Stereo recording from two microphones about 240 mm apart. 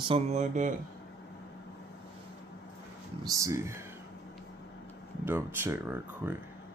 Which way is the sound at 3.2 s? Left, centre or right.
Centre.